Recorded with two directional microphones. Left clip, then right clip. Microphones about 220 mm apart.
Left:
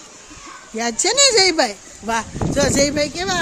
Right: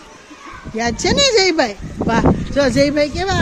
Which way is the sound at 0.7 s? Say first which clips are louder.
Right 2 dB; 10° left (ahead or behind).